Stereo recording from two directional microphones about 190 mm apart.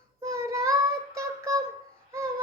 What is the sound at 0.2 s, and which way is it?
Child singing, 15° right (ahead or behind).